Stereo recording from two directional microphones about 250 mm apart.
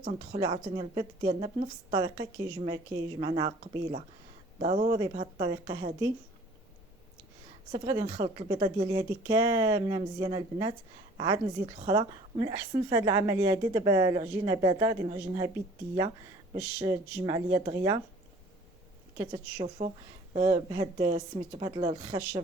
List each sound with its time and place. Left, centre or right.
0.0 s a woman's voice: right
7.7 s a woman's voice: centre
16.8 s a woman's voice: centre
19.1 s a woman's voice: centre